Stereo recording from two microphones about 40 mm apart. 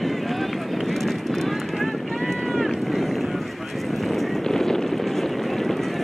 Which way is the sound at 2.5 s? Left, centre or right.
Centre.